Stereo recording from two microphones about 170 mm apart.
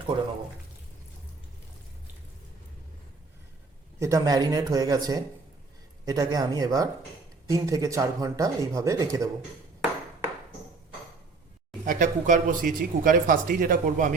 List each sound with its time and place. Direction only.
4.0 s speech: 20° right (ahead or behind)
11.9 s speech: 50° right (ahead or behind)